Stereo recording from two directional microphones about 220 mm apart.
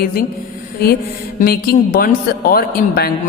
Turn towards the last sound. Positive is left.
turn(degrees=40)  # may be behind; listen again after turning